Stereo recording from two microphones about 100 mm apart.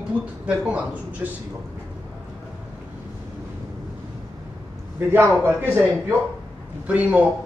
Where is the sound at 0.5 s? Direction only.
15° right (ahead or behind).